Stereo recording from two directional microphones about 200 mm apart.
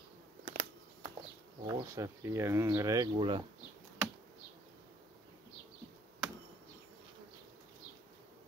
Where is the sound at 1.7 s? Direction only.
15° right (ahead or behind).